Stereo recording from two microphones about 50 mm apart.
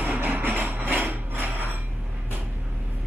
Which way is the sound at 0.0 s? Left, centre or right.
Right.